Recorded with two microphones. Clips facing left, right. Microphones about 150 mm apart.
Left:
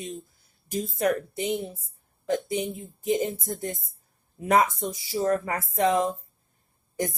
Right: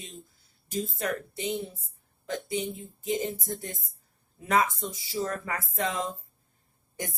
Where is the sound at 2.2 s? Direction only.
35° left (ahead or behind).